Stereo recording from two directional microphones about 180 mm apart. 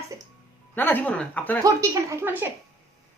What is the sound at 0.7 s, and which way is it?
Speech, 10° left (ahead or behind).